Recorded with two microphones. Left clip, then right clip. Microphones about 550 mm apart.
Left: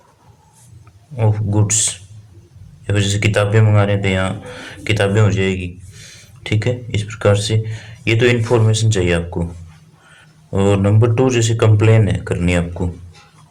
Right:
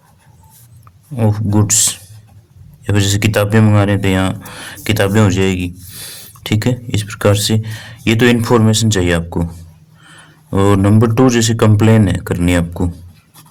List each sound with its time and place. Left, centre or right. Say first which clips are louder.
1.1 s speech: right 4 dB; right
10.5 s speech: right 3 dB; right